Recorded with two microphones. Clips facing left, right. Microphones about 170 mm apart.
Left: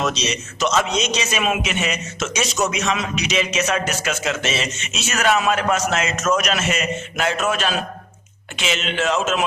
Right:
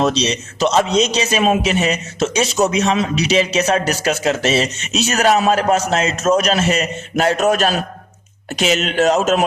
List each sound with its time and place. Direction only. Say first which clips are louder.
0.0 s a man's voice: right 6 dB; 30° right (ahead or behind)